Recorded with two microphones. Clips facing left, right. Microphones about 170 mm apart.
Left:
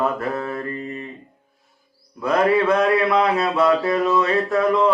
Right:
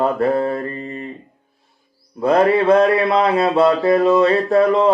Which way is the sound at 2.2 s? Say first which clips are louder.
Right 4 dB; 30° right (ahead or behind).